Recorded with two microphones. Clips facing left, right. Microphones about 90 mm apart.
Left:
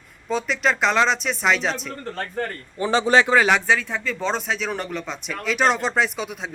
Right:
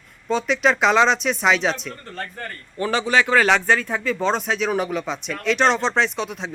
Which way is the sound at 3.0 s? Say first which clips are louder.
Left 3 dB; 30° left (ahead or behind).